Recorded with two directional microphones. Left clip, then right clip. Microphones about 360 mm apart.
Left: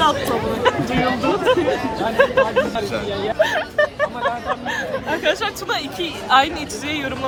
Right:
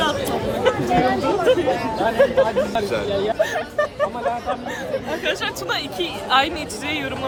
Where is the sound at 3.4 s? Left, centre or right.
Left.